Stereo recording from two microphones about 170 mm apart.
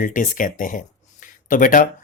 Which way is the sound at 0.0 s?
50° left (ahead or behind).